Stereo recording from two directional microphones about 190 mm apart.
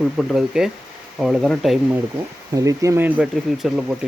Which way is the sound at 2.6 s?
15° right (ahead or behind).